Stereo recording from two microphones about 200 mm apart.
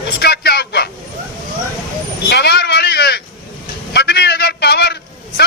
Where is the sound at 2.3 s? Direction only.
55° left (ahead or behind).